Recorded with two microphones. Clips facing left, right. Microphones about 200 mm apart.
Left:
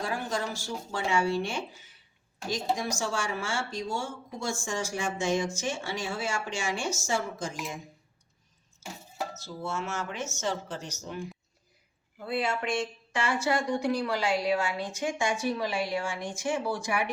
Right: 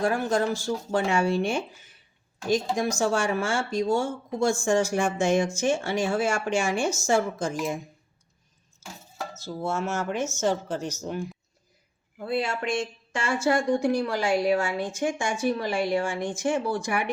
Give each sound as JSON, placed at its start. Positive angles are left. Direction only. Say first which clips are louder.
{"t": 0.0, "sound": "speech", "louder": "right 8 dB", "side_deg": -50}
{"t": 9.4, "sound": "speech", "louder": "right 10 dB", "side_deg": -45}
{"t": 12.4, "sound": "speech", "louder": "right 1 dB", "side_deg": -45}